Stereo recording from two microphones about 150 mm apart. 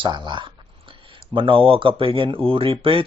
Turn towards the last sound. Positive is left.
turn(degrees=-35)  # may be behind; listen again after turning